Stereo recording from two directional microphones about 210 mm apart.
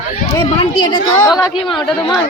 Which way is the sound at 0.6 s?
25° left (ahead or behind).